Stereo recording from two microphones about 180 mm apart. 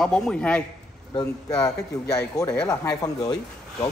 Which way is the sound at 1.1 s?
20° left (ahead or behind).